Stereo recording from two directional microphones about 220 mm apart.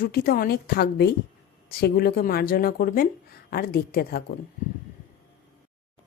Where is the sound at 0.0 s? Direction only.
45° left (ahead or behind).